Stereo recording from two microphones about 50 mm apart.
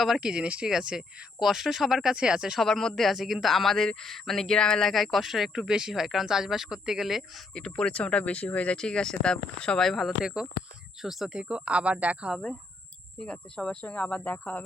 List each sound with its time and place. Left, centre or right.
0.2 s speech: centre
0.7 s speech: centre
2.1 s speech: centre
2.6 s speech: centre
4.9 s speech: centre
5.5 s speech: centre
7.5 s speech: centre
8.8 s speech: centre
10.2 s speech: centre
11.3 s speech: right
13.1 s speech: centre; by 14.6 s left